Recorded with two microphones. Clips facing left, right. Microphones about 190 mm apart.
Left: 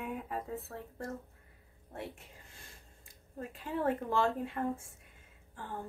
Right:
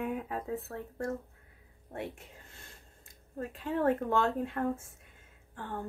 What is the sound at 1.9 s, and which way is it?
Speech, 65° right (ahead or behind).